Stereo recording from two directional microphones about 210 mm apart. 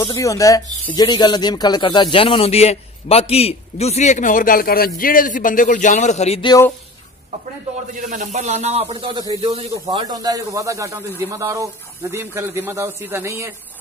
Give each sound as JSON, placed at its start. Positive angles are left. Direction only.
{"t": 0.0, "sound": "speech", "side_deg": 15}
{"t": 8.1, "sound": "speech", "side_deg": -35}